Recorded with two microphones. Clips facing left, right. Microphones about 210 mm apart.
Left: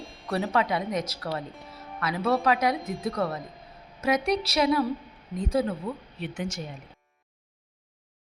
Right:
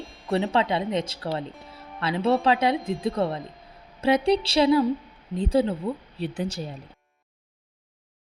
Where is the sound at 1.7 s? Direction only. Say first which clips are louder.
Right 3 dB; 30° right (ahead or behind).